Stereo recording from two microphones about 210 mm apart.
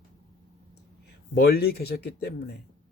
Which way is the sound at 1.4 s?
50° left (ahead or behind).